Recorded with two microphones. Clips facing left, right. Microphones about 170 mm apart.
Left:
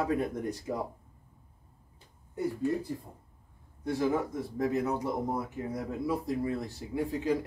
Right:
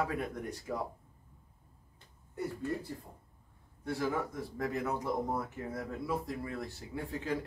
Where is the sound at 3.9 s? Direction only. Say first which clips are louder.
Left 5 dB; 20° left (ahead or behind).